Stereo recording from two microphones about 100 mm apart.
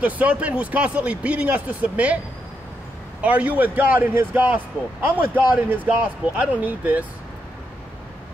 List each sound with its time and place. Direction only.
0.0 s speech: 15° right (ahead or behind)
3.2 s speech: 15° right (ahead or behind)